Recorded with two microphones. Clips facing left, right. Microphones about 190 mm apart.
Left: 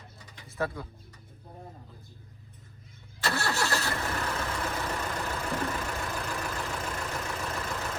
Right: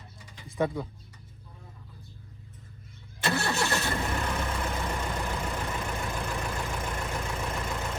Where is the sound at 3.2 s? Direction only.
20° right (ahead or behind).